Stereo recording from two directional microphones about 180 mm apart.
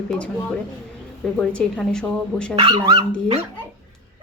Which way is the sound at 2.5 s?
25° right (ahead or behind).